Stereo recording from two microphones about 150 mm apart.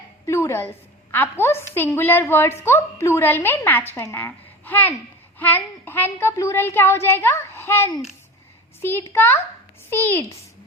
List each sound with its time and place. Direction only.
0.3 s a woman's voice: 20° left (ahead or behind)